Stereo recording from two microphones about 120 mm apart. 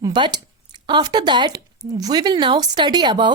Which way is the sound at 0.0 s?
35° right (ahead or behind).